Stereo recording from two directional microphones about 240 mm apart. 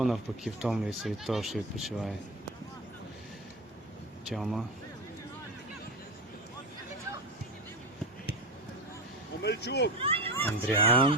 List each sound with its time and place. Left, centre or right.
0.0 s speech: centre
4.3 s speech: centre
9.4 s speech: left
10.0 s a sound: right
10.3 s speech: centre